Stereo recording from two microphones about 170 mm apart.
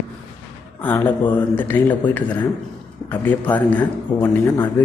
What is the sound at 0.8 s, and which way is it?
A man's voice, 10° left (ahead or behind).